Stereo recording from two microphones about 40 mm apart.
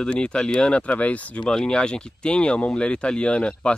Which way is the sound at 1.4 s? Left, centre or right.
Centre.